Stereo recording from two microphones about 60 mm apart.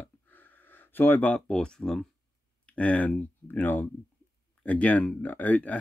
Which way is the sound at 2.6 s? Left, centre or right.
Left.